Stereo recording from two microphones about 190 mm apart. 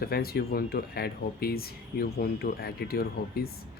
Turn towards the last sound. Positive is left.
turn(degrees=55)  # may be behind; listen again after turning